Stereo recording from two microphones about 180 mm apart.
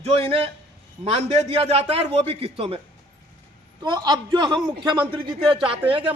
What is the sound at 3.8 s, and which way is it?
A man's voice, 25° right (ahead or behind).